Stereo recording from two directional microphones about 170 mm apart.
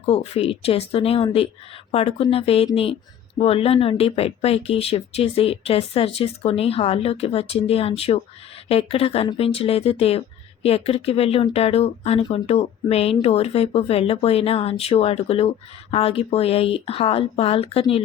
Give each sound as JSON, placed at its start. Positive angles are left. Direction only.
{"t": 0.0, "sound": "speech", "side_deg": 35}